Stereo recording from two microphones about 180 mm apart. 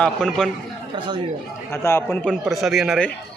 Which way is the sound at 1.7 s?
15° left (ahead or behind).